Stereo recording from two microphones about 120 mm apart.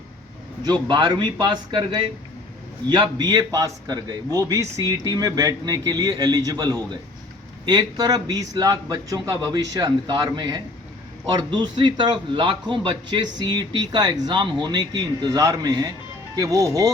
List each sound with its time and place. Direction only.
0.6 s a man's voice: 40° right (ahead or behind)